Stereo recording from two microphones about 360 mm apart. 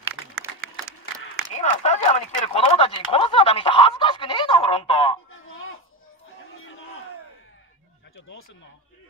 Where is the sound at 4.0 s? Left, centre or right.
Centre.